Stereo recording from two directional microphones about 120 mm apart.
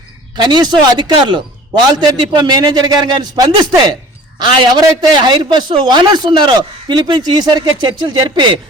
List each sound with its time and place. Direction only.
0.3 s a man's voice: 35° right (ahead or behind)